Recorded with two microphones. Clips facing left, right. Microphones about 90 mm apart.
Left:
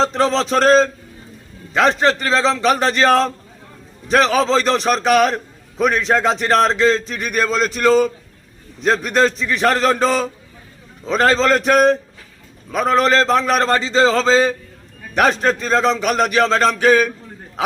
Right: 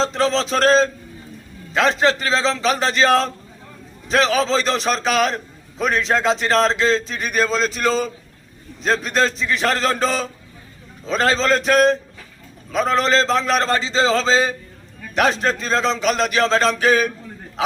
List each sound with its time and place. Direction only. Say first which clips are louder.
0.0 s a man's voice: left 2 dB; 55° left (ahead or behind)
4.2 s a man's voice: left 2 dB; 55° left (ahead or behind)
11.1 s a man's voice: left 3 dB; 55° left (ahead or behind)